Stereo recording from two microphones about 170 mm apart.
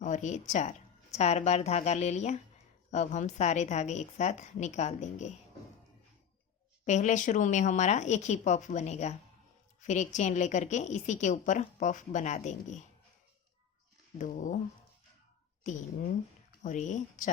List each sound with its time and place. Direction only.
0.0 s a woman's voice: 45° left (ahead or behind)
6.8 s a woman's voice: 45° left (ahead or behind)
14.2 s a woman's voice: 50° left (ahead or behind)
16.6 s a woman's voice: 45° left (ahead or behind)